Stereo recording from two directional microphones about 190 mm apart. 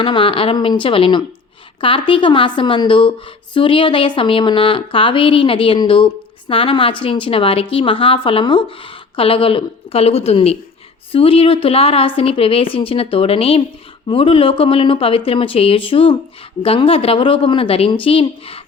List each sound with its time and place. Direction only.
0.0 s a woman's voice: 25° left (ahead or behind)